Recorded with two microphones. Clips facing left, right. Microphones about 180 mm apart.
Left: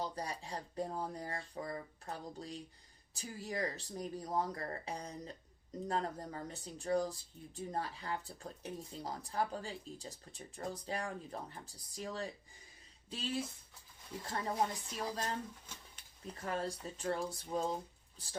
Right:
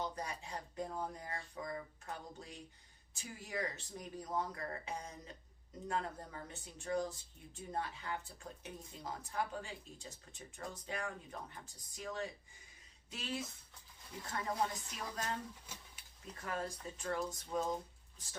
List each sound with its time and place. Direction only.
0.0 s speech: 35° left (ahead or behind)
15.7 s speech: 5° right (ahead or behind)
16.2 s speech: 30° left (ahead or behind)